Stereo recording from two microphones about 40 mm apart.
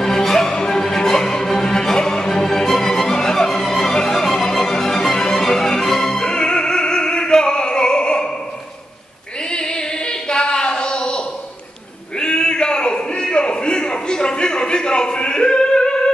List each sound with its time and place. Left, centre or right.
0.0 s music: centre
9.5 s singing: left
12.2 s a sound: centre